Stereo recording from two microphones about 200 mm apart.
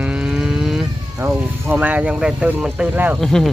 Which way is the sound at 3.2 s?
Centre (ahead or behind).